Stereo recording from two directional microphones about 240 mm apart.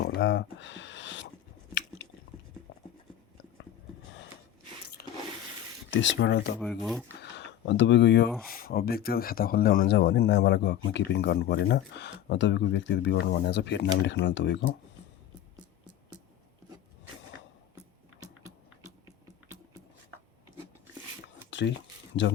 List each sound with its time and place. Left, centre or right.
0.0 s a sound: left
5.0 s water: left
5.9 s speech: left
6.6 s speech: centre
7.2 s speech: left
21.5 s a sound: left